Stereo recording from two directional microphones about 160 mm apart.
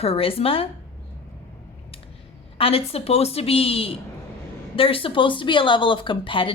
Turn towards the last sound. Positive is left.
turn(degrees=30)  # may be behind; listen again after turning